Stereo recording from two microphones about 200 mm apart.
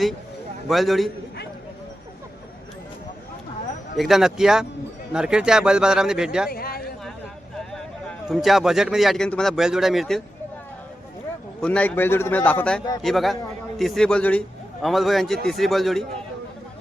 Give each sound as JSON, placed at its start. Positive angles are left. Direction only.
{"t": 0.7, "sound": "a man's voice", "side_deg": 0}
{"t": 3.9, "sound": "a man's voice", "side_deg": 0}
{"t": 6.5, "sound": "a sound", "side_deg": 50}
{"t": 8.3, "sound": "a man's voice", "side_deg": 0}
{"t": 11.6, "sound": "a man's voice", "side_deg": 5}